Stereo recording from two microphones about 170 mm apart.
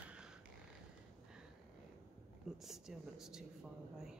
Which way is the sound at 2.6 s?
Centre (ahead or behind).